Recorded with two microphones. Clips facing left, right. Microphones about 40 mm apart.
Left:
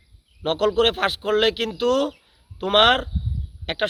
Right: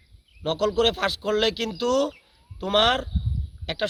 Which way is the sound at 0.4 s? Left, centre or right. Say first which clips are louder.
Left 3 dB; left.